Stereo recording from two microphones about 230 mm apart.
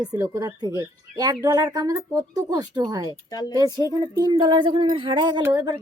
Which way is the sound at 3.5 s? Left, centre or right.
Centre.